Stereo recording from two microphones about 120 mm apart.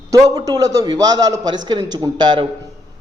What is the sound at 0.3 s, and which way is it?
A man's voice, 30° right (ahead or behind).